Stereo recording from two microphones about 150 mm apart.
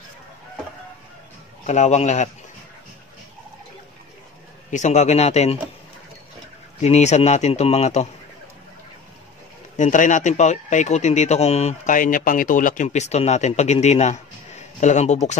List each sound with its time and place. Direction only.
1.7 s speech: 50° left (ahead or behind)
4.6 s speech: 50° left (ahead or behind)
6.8 s speech: 50° left (ahead or behind)
9.8 s speech: 55° left (ahead or behind)